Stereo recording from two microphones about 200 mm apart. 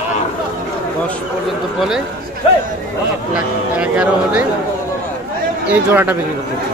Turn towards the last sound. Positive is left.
turn(degrees=-10)  # may be behind; listen again after turning